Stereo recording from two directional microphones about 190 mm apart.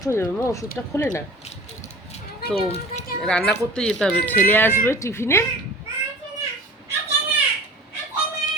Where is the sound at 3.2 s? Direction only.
5° left (ahead or behind).